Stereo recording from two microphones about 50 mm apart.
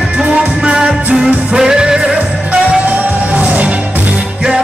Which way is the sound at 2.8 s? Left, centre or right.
Right.